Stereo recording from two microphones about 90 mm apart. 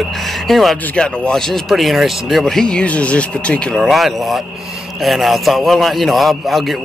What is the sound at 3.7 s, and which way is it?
Speech, centre (ahead or behind).